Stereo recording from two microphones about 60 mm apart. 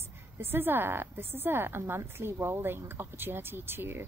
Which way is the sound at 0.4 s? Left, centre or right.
Right.